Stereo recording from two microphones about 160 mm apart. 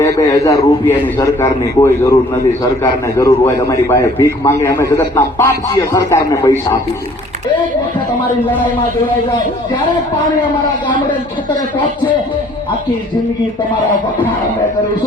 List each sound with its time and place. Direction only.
0.0 s a man's voice: 20° left (ahead or behind)
3.2 s a man's voice: 20° left (ahead or behind)